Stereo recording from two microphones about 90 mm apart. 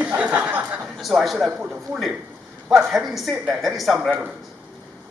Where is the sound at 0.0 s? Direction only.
15° right (ahead or behind).